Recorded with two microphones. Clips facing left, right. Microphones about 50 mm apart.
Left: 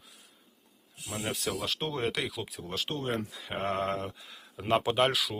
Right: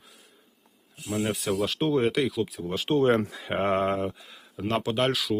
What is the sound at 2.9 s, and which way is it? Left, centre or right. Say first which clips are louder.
Speech: right 13 dB; right.